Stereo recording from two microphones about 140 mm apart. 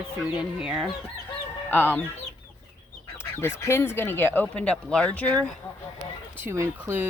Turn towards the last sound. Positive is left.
turn(degrees=-20)  # may be behind; listen again after turning